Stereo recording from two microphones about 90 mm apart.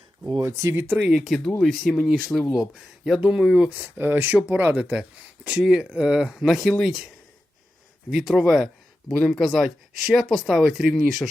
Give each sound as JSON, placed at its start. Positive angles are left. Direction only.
{"t": 0.3, "sound": "speech", "side_deg": -35}
{"t": 0.9, "sound": "speech", "side_deg": -10}
{"t": 3.8, "sound": "speech", "side_deg": -25}
{"t": 8.1, "sound": "speech", "side_deg": -5}